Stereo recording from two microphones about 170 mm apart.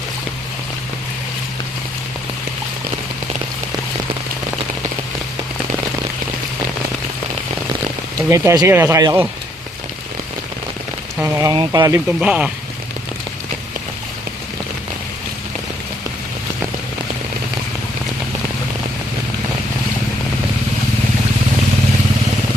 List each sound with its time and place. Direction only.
8.3 s speech: 15° right (ahead or behind)
11.2 s speech: 20° right (ahead or behind)
12.2 s speech: 5° right (ahead or behind)